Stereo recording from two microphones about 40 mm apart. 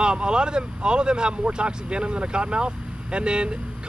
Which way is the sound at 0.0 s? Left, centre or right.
Right.